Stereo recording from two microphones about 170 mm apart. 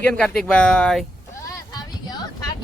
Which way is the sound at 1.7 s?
25° left (ahead or behind).